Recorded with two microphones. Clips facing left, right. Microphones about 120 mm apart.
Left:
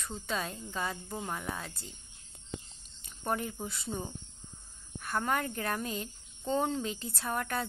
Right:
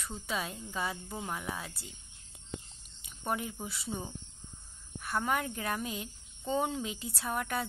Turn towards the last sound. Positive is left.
turn(degrees=-5)  # may be behind; listen again after turning